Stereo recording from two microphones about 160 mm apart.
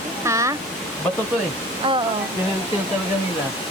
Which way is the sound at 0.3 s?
20° right (ahead or behind).